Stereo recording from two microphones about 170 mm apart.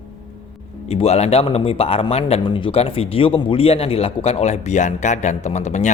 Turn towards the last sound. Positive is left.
turn(degrees=45)  # may be behind; listen again after turning